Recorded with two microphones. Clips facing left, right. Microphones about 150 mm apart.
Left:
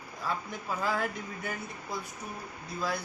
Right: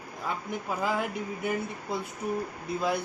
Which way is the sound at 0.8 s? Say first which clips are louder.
Right 2 dB; 15° right (ahead or behind).